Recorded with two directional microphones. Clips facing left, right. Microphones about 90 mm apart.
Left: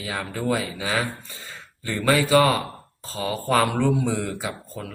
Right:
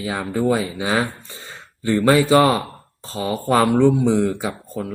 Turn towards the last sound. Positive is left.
turn(degrees=-25)  # may be behind; listen again after turning